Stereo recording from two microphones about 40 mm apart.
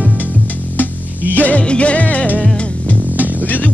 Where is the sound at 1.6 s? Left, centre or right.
Left.